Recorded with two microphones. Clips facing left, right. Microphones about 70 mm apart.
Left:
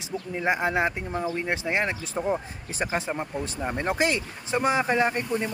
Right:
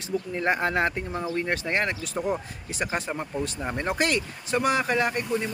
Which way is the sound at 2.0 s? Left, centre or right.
Left.